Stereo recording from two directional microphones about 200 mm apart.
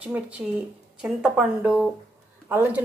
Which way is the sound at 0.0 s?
5° right (ahead or behind).